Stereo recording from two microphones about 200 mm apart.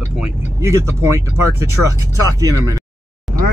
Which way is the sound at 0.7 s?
15° right (ahead or behind).